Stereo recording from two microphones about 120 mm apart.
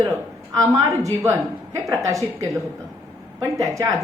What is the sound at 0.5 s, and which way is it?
A woman's voice, 30° right (ahead or behind).